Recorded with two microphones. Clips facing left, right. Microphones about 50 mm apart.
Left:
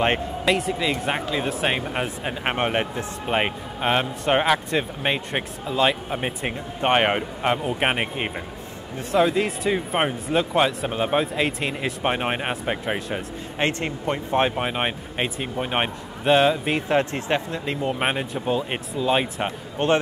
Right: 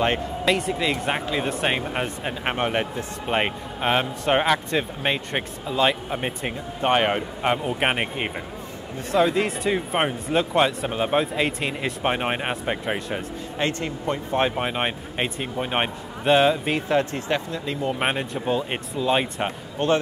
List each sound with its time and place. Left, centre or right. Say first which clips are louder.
0.5 s speech: even; centre
2.4 s speech: left 1 dB; centre
3.3 s speech: even; centre
6.8 s speech: left 1 dB; left
7.4 s speech: even; centre
13.6 s speech: left 2 dB; left
14.4 s speech: right 1 dB; centre
16.9 s speech: left 1 dB; left
17.8 s speech: even; centre
19.8 s speech: left 1 dB; left